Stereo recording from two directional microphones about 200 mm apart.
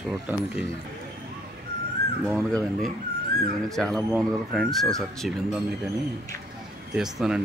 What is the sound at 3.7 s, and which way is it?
Speech, centre (ahead or behind).